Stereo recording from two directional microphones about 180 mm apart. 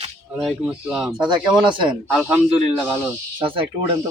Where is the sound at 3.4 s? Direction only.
30° right (ahead or behind).